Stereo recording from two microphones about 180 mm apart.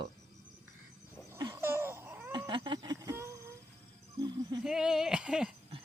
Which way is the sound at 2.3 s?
25° right (ahead or behind).